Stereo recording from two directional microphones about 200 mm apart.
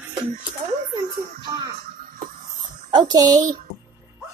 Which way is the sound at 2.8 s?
20° right (ahead or behind).